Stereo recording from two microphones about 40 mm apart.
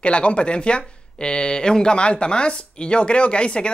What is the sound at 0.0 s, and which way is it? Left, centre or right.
Speech, left.